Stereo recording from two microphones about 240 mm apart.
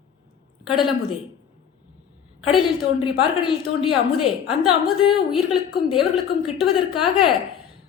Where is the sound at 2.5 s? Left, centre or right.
Centre.